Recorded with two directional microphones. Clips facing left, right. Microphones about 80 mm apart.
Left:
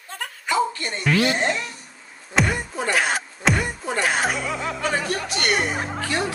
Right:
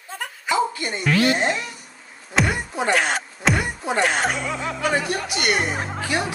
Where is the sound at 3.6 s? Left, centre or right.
Centre.